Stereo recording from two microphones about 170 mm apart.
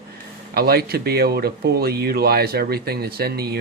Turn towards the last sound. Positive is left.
turn(degrees=-65)  # may be behind; listen again after turning